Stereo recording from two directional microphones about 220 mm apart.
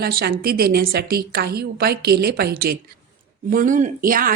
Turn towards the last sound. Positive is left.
turn(degrees=-40)  # may be behind; listen again after turning